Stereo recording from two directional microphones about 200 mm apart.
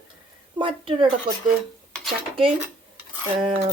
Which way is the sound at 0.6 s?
25° right (ahead or behind).